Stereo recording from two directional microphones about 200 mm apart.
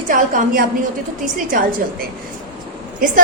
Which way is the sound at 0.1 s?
40° right (ahead or behind).